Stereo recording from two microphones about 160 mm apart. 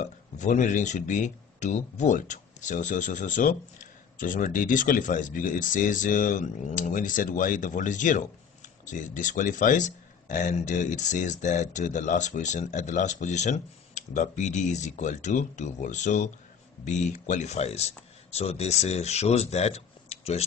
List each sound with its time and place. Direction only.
0.0 s speech: 50° left (ahead or behind)